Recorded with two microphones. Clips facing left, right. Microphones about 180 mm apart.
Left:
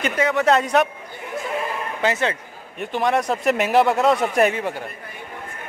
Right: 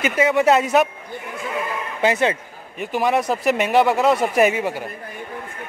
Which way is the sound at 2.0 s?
15° right (ahead or behind).